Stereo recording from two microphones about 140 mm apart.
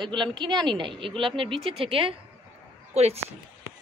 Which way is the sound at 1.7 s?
40° right (ahead or behind).